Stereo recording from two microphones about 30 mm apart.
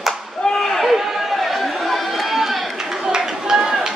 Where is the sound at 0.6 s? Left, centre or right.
Centre.